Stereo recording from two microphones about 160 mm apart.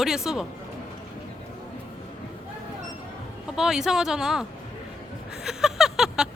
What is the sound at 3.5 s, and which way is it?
Speech, 5° right (ahead or behind).